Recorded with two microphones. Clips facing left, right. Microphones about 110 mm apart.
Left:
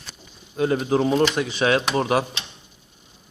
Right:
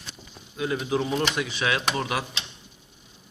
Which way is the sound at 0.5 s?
45° left (ahead or behind).